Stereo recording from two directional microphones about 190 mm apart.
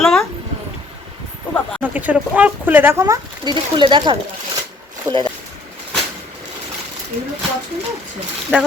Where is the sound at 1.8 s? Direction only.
10° right (ahead or behind); by 4.2 s 25° right (ahead or behind).